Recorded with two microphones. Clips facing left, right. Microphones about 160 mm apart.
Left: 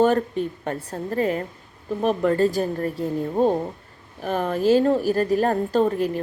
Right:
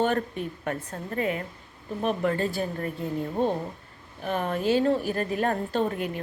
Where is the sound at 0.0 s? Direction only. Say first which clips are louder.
Left 6 dB; 35° left (ahead or behind).